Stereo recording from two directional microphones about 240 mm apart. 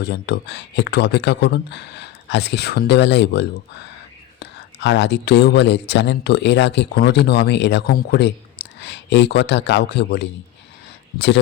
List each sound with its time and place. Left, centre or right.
0.0 s speech: left